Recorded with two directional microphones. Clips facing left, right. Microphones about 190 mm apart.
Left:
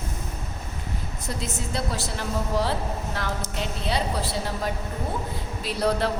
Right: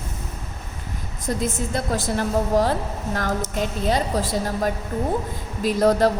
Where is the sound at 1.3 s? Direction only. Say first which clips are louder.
Right 7 dB; 50° right (ahead or behind).